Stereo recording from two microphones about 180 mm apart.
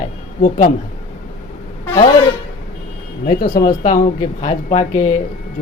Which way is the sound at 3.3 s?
55° left (ahead or behind).